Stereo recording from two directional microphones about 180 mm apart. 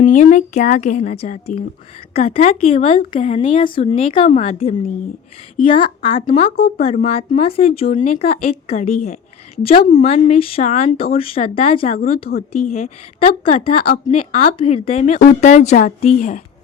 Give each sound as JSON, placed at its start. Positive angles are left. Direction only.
{"t": 0.0, "sound": "a woman's voice", "side_deg": 45}